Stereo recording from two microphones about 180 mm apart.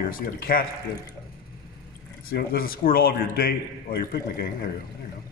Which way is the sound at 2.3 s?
55° left (ahead or behind).